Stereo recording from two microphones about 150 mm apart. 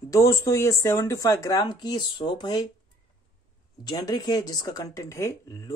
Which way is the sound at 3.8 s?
25° left (ahead or behind).